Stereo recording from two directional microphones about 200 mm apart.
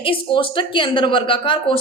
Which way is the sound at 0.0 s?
25° left (ahead or behind).